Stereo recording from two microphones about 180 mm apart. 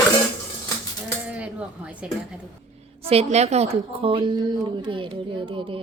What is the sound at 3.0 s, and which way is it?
A woman's voice, 35° right (ahead or behind).